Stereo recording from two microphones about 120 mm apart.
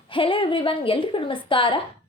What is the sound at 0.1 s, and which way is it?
A woman's voice, 45° left (ahead or behind).